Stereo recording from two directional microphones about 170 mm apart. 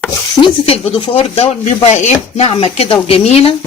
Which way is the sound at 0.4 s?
35° left (ahead or behind).